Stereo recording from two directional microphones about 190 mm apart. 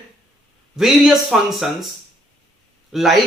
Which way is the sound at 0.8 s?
Centre (ahead or behind).